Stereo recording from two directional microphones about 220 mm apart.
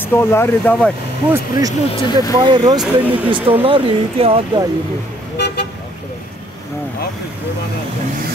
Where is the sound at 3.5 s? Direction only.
25° right (ahead or behind).